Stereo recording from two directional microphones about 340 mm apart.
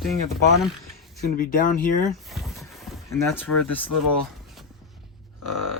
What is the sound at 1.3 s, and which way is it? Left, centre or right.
Speech, left.